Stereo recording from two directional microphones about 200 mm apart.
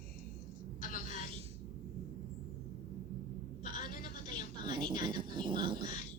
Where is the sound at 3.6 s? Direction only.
40° left (ahead or behind).